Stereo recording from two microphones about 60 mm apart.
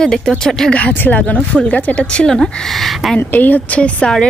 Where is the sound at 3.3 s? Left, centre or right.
Left.